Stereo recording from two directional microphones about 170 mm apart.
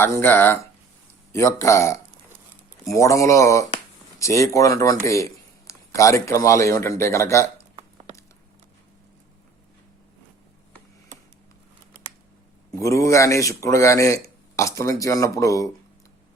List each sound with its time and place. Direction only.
0.0 s speech: 15° left (ahead or behind)
12.7 s speech: 20° left (ahead or behind)